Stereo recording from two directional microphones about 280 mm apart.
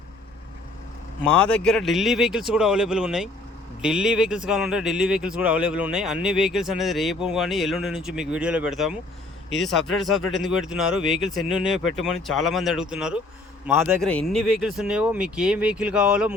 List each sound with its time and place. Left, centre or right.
1.2 s speech: centre